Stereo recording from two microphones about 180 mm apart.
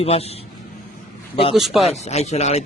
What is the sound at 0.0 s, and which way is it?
Speech, 35° left (ahead or behind).